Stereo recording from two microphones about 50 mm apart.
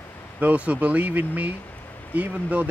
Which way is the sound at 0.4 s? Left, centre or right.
Right.